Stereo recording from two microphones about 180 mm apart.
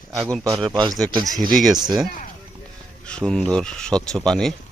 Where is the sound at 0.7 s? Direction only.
20° right (ahead or behind).